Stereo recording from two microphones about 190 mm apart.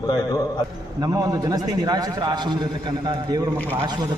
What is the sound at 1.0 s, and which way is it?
A man's voice, 20° right (ahead or behind).